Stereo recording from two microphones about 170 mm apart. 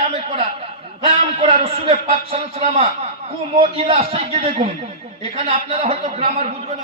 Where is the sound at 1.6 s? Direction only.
35° right (ahead or behind).